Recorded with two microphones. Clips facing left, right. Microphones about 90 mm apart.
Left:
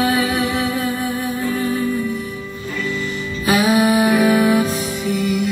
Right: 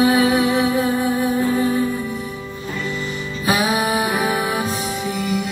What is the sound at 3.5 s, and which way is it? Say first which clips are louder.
Music: left 4 dB; 20° right (ahead or behind).